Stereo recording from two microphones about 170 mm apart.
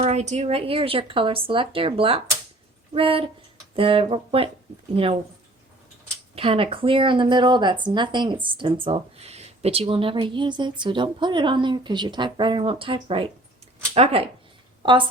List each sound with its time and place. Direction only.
0.0 s speech: 40° right (ahead or behind)
6.3 s speech: 35° right (ahead or behind)